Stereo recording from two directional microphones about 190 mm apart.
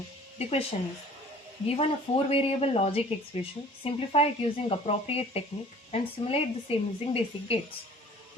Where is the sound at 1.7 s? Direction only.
30° left (ahead or behind).